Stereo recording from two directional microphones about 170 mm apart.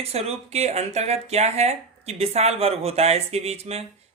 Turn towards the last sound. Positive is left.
turn(degrees=-40)  # may be behind; listen again after turning